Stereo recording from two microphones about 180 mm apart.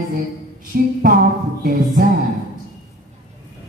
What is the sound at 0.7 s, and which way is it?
Music, 60° right (ahead or behind).